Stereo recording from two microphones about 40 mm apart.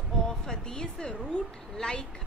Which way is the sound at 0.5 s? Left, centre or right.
Centre.